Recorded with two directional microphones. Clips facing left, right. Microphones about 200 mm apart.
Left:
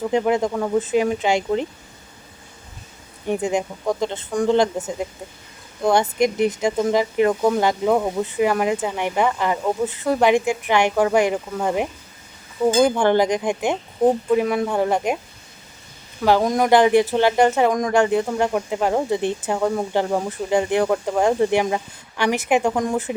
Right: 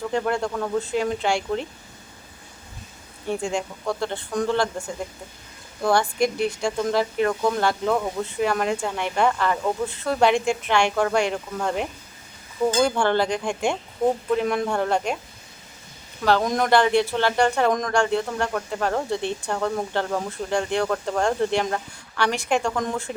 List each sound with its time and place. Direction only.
0.0 s speech: 15° left (ahead or behind)
3.5 s speech: 15° left (ahead or behind)
14.3 s speech: 5° left (ahead or behind)
16.2 s speech: 10° left (ahead or behind)